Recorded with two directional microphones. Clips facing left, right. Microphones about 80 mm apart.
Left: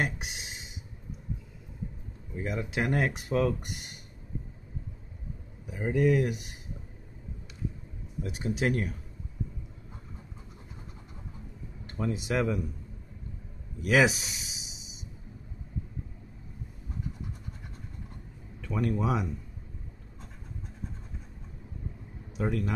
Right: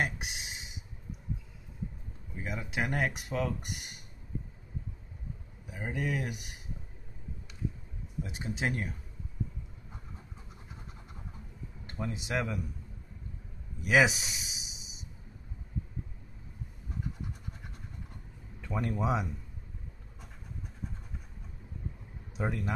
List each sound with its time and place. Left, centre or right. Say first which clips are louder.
0.0 s a sound: left 1 dB; centre
2.3 s speech: left 4 dB; centre
3.4 s speech: left 6 dB; centre
5.8 s speech: left 8 dB; centre
6.0 s speech: left 9 dB; centre
8.2 s speech: left 4 dB; right
12.0 s speech: left 5 dB; centre
13.8 s speech: left 2 dB; centre
18.6 s speech: left 3 dB; centre
22.4 s speech: left 4 dB; centre